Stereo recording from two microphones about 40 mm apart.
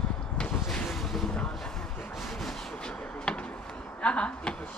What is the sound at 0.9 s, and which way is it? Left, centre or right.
Vehicle, centre.